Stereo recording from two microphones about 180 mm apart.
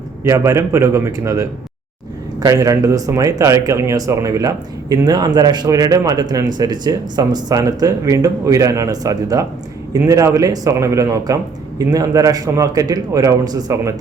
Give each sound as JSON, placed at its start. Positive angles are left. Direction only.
{"t": 0.3, "sound": "speech", "side_deg": -15}